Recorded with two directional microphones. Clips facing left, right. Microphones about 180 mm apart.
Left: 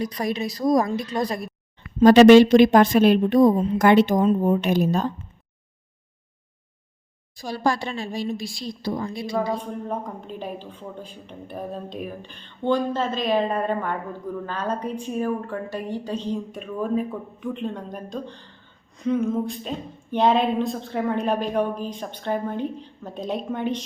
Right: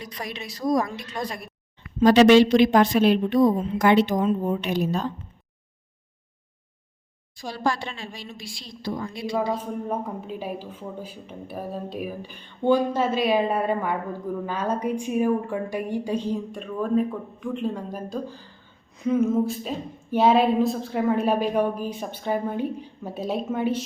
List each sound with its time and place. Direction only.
0.0 s a woman's voice: 40° left (ahead or behind)
7.5 s a woman's voice: 40° left (ahead or behind)
9.3 s speech: 5° right (ahead or behind)
16.5 s speech: centre (ahead or behind)